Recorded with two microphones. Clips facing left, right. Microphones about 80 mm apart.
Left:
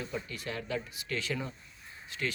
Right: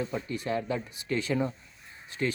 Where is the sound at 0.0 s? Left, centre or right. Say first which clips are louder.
Right 6 dB; right.